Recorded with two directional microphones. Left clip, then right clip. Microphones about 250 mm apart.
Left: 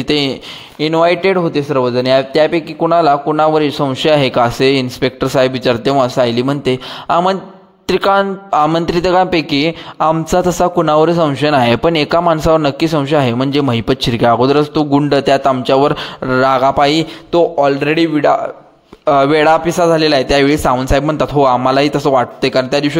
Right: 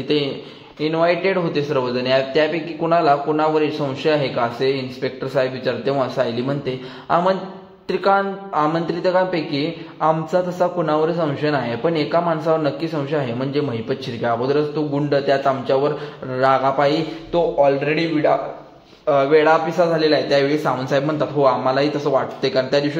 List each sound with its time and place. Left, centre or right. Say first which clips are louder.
0.1 s a man's voice: left 6 dB; left